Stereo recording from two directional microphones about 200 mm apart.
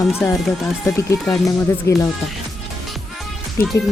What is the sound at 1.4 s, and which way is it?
Speech, 15° left (ahead or behind).